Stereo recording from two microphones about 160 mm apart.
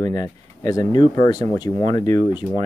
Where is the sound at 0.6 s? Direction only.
25° left (ahead or behind).